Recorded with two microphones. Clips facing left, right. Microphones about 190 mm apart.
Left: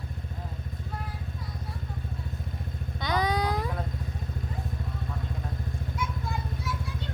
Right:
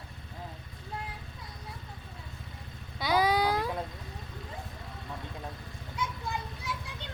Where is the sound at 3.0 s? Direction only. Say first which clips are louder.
Right 1 dB; 5° right (ahead or behind).